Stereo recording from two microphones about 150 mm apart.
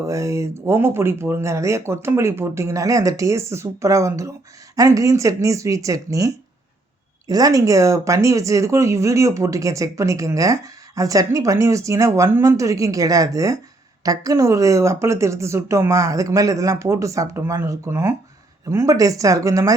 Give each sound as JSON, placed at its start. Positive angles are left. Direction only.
{"t": 0.0, "sound": "speech", "side_deg": -20}